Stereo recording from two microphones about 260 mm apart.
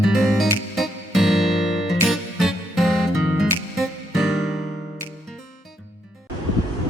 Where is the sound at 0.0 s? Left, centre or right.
Centre.